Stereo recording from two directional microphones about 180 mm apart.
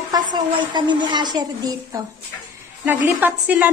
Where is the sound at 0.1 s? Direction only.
25° right (ahead or behind).